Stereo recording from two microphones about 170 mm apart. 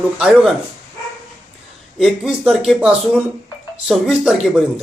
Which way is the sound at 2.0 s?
5° right (ahead or behind).